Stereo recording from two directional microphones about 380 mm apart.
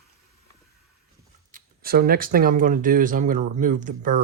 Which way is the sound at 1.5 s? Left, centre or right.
Right.